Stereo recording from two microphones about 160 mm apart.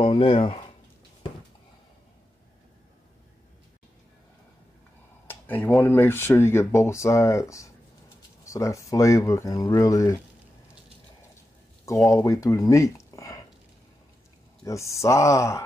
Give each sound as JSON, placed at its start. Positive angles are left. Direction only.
{"t": 0.0, "sound": "speech", "side_deg": 35}
{"t": 5.3, "sound": "speech", "side_deg": 10}
{"t": 12.1, "sound": "speech", "side_deg": 20}
{"t": 14.6, "sound": "speech", "side_deg": 20}